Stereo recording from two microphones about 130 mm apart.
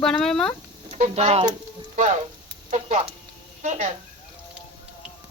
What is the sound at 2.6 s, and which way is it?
Speech, 65° right (ahead or behind).